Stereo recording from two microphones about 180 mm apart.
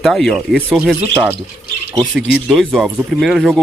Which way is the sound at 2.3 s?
Centre (ahead or behind).